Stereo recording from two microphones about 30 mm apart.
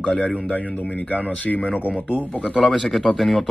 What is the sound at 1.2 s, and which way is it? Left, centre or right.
Speech, left.